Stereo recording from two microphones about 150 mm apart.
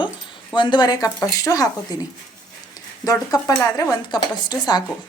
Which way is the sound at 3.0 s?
25° left (ahead or behind).